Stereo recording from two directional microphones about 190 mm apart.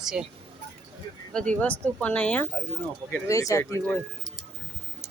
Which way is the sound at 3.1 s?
15° left (ahead or behind).